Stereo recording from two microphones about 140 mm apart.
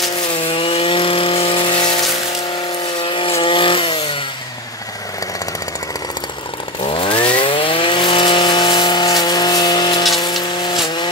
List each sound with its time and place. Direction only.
0.4 s chainsaw: 40° left (ahead or behind)
6.8 s chainsaw: 40° left (ahead or behind)
10.2 s vehicle: 30° left (ahead or behind)